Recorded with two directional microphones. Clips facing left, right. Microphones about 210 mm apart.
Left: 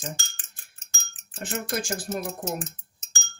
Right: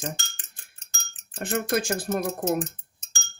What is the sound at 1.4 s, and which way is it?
Speech, 60° right (ahead or behind).